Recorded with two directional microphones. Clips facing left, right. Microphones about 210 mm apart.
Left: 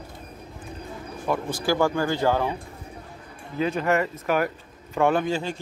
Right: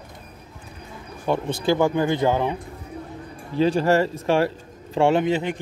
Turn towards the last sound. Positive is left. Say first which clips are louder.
# right 4 dB
turn(degrees=-20)  # may be behind; listen again after turning